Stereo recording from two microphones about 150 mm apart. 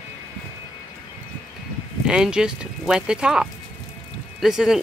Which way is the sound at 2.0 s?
5° right (ahead or behind).